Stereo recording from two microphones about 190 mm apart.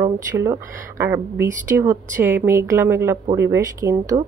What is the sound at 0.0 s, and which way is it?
Speech, 15° right (ahead or behind).